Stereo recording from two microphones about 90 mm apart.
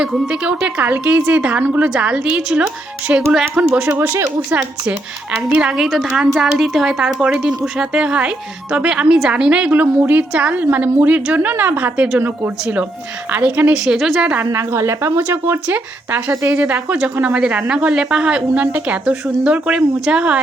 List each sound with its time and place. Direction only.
0.0 s speech: 5° right (ahead or behind)
5.8 s speech: centre (ahead or behind); by 12.0 s 20° right (ahead or behind)
13.3 s speech: 15° right (ahead or behind)
13.8 s a woman's voice: 5° right (ahead or behind)
14.5 s speech: 30° right (ahead or behind)